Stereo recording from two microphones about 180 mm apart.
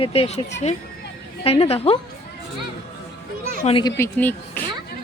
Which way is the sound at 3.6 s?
30° left (ahead or behind).